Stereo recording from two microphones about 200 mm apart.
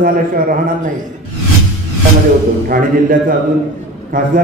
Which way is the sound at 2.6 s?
45° right (ahead or behind).